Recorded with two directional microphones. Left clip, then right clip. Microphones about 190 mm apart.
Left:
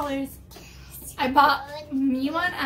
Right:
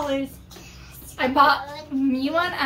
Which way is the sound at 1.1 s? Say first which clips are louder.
Right 1 dB; 20° left (ahead or behind).